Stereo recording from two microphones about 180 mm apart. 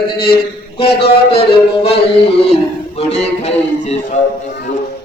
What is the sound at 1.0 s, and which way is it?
Music, 35° left (ahead or behind).